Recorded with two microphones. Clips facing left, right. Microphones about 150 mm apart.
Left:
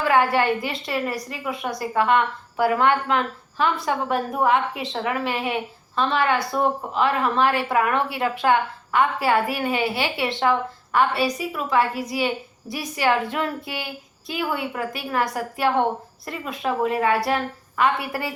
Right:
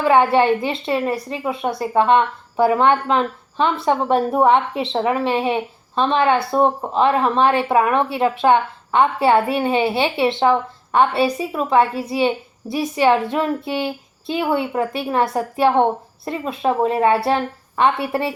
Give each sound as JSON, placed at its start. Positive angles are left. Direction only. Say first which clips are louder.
{"t": 0.0, "sound": "a woman's voice", "louder": "right 5 dB", "side_deg": -25}